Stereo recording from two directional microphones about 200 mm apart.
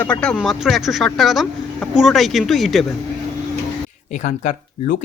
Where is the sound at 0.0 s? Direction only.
5° left (ahead or behind).